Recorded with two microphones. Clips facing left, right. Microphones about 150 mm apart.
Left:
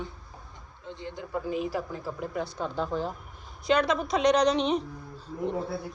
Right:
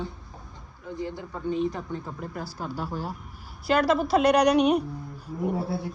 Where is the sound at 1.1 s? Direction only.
20° left (ahead or behind).